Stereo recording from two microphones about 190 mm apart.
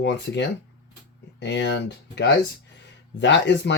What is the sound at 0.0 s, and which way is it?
Speech, 65° left (ahead or behind).